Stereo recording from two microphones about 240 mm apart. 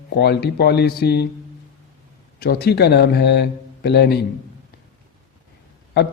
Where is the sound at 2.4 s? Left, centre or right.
Left.